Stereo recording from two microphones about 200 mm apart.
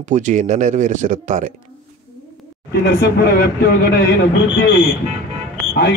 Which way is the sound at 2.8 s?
55° left (ahead or behind).